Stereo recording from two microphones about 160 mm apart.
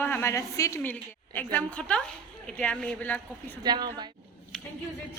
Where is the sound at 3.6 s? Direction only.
25° right (ahead or behind).